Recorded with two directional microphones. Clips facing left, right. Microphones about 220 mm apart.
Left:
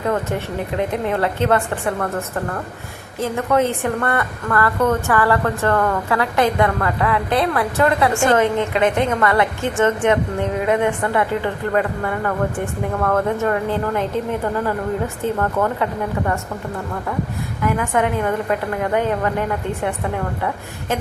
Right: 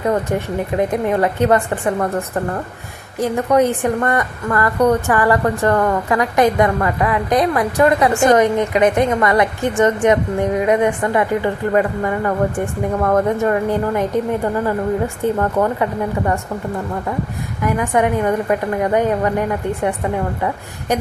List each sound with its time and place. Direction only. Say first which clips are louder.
0.1 s a woman's voice: right 3 dB; 15° right (ahead or behind)
3.2 s a woman's voice: right 3 dB; 15° right (ahead or behind)
17.7 s a woman's voice: right 3 dB; 15° right (ahead or behind)